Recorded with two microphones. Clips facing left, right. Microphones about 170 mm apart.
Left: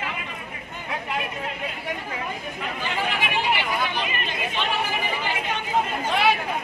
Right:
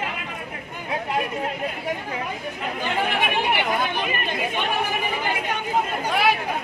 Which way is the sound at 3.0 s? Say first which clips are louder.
Even; 55° right (ahead or behind).